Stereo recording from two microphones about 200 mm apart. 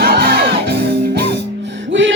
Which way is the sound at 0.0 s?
50° right (ahead or behind).